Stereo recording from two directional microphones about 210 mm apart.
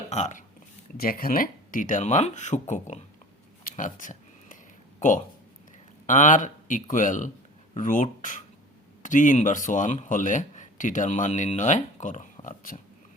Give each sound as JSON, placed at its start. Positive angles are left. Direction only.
{"t": 0.1, "sound": "speech", "side_deg": 35}
{"t": 3.6, "sound": "a sound", "side_deg": 40}
{"t": 4.9, "sound": "speech", "side_deg": 35}